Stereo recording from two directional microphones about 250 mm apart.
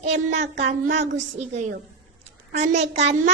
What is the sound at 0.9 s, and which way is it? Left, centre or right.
Speech, right.